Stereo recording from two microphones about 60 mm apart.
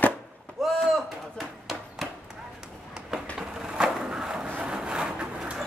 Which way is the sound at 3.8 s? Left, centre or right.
Centre.